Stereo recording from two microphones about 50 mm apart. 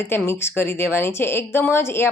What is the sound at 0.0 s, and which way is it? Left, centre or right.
A woman's voice, left.